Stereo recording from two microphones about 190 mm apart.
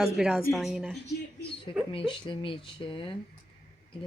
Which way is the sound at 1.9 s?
25° left (ahead or behind).